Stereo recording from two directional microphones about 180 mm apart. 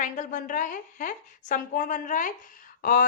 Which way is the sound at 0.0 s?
45° left (ahead or behind).